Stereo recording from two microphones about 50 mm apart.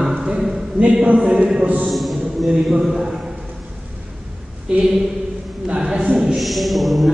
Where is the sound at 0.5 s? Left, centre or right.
Right.